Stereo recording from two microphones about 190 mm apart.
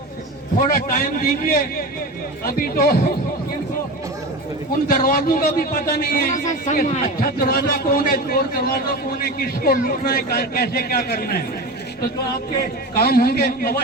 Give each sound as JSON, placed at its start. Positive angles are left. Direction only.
{"t": 0.7, "sound": "a man's voice", "side_deg": 50}
{"t": 4.9, "sound": "a man's voice", "side_deg": 45}
{"t": 12.9, "sound": "a man's voice", "side_deg": 55}